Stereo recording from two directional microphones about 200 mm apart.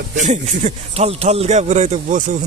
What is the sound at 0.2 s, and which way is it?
Speech, 35° right (ahead or behind).